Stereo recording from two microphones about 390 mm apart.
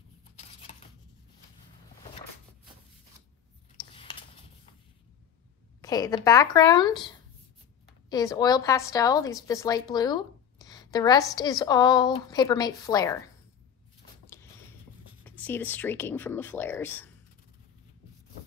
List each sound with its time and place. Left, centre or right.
0.4 s scissors: centre
3.9 s a sound: centre
5.8 s a woman's voice: centre
15.2 s speech: centre